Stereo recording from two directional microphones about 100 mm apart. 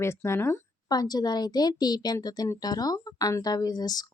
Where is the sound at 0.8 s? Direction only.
40° left (ahead or behind).